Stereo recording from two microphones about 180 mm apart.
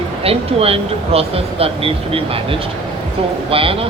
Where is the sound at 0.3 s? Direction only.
35° right (ahead or behind).